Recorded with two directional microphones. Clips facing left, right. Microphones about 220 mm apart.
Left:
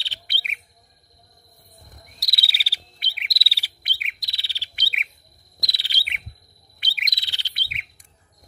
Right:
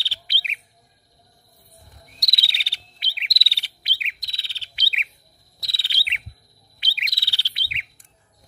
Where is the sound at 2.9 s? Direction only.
50° left (ahead or behind).